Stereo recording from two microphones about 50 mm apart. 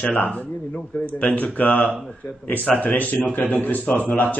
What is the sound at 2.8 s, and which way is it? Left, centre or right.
Speech, left.